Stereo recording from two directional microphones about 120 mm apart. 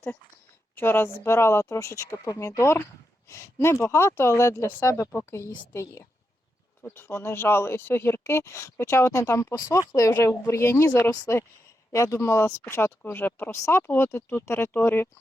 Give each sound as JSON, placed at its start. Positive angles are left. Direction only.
{"t": 0.8, "sound": "speech", "side_deg": 20}